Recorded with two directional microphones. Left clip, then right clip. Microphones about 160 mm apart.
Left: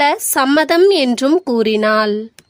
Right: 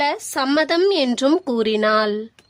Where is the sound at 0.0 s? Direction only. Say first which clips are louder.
Left 7 dB; 35° left (ahead or behind).